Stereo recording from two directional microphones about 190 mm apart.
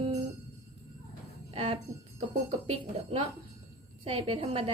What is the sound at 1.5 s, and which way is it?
A woman's voice, 30° right (ahead or behind).